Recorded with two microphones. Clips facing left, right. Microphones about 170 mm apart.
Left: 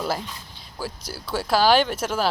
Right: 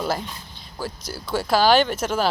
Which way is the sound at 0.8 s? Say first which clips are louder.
Right 1 dB; 5° left (ahead or behind).